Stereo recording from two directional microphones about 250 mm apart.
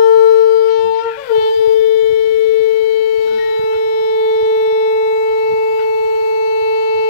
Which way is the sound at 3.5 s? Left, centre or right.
Left.